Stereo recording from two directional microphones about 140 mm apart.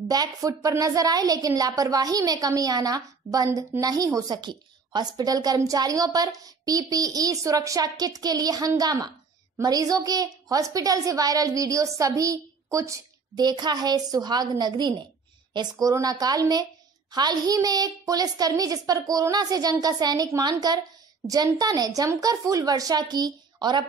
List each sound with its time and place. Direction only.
0.1 s a woman's voice: 25° right (ahead or behind)